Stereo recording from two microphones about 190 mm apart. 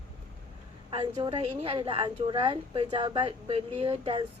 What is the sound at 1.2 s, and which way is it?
A woman's voice, 30° right (ahead or behind).